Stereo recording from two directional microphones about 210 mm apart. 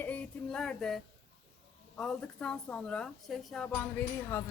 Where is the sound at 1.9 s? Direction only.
5° left (ahead or behind).